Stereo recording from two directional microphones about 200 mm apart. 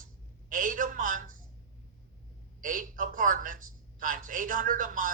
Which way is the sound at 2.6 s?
40° right (ahead or behind).